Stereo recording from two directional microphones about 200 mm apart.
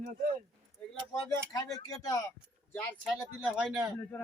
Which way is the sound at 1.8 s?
20° left (ahead or behind).